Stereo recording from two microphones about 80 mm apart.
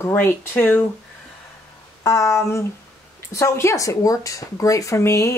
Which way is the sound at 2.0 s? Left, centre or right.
Left.